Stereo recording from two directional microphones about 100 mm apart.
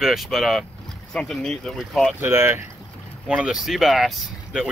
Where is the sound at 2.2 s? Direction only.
25° right (ahead or behind).